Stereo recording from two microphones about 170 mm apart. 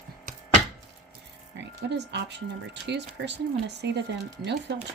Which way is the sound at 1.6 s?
90° right.